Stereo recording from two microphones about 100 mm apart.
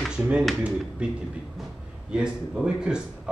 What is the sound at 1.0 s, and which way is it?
A man's voice, 10° right (ahead or behind).